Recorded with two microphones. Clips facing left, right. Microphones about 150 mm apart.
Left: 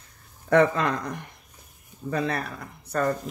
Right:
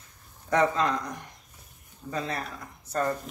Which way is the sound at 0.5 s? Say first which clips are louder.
Left 4 dB; 60° left (ahead or behind).